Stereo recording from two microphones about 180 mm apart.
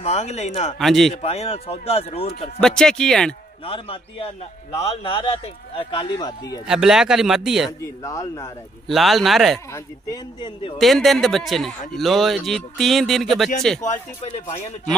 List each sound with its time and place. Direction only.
0.0 s a man's voice: 35° left (ahead or behind)
0.7 s speech: centre (ahead or behind)
1.1 s a man's voice: 35° left (ahead or behind)
2.6 s speech: 5° left (ahead or behind)
3.6 s a man's voice: 30° left (ahead or behind)
6.6 s speech: 5° right (ahead or behind)
8.0 s speech: 15° left (ahead or behind)
8.8 s speech: centre (ahead or behind)
9.7 s speech: 15° left (ahead or behind)
10.8 s speech: centre (ahead or behind)